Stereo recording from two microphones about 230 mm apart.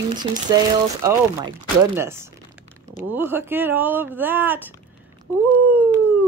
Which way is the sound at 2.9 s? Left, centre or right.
Centre.